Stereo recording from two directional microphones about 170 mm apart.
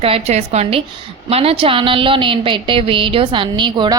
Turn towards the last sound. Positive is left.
turn(degrees=-25)  # may be behind; listen again after turning